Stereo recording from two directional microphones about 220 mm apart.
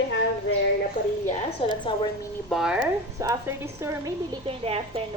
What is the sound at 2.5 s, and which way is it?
Speech, 5° right (ahead or behind).